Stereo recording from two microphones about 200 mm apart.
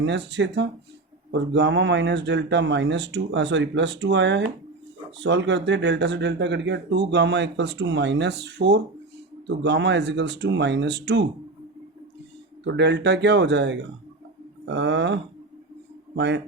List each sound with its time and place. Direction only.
0.0 s speech: 65° right (ahead or behind)
12.6 s speech: 60° right (ahead or behind)